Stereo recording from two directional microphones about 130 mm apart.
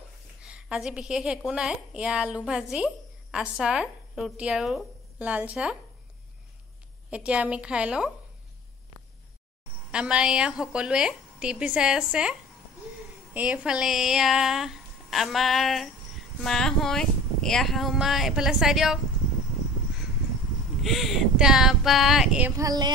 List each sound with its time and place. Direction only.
0.4 s a woman's voice: 10° right (ahead or behind)
7.1 s a woman's voice: 10° right (ahead or behind)
9.8 s a woman's voice: 10° right (ahead or behind)
20.8 s speech: centre (ahead or behind)
22.6 s a sound: 30° right (ahead or behind)